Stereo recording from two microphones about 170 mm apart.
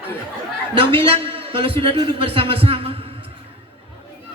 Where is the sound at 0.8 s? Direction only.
35° right (ahead or behind).